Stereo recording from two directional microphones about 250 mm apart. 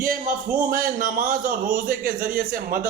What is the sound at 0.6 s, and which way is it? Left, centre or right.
A man's voice, right.